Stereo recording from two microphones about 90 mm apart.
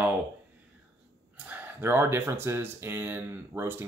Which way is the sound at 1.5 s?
25° right (ahead or behind).